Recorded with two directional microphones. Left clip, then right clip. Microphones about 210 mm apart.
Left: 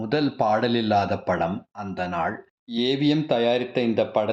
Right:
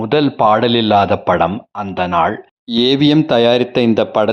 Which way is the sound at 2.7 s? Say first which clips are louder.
Right 10 dB; 45° right (ahead or behind).